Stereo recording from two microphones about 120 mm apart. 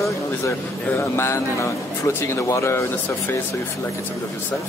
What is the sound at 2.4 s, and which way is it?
Speech, 25° left (ahead or behind).